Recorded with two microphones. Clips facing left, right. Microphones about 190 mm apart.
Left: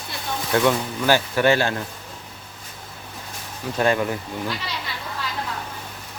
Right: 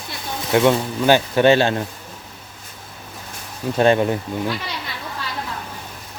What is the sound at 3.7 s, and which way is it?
Speech, 25° right (ahead or behind).